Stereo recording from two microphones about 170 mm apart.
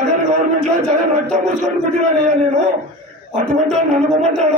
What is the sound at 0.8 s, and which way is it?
Speech, 45° right (ahead or behind).